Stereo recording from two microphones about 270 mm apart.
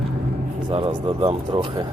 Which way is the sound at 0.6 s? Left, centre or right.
Centre.